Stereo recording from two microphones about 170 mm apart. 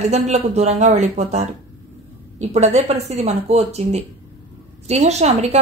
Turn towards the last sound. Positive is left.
turn(degrees=-40)  # may be behind; listen again after turning